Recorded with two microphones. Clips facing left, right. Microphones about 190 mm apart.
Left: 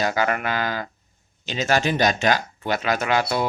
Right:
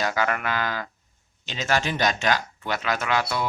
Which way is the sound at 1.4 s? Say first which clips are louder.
Left 6 dB; 10° left (ahead or behind).